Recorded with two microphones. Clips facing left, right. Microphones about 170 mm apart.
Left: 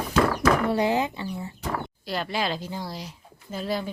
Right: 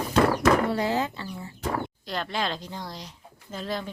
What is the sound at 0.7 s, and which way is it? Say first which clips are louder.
Speech: left 3 dB; 15° left (ahead or behind).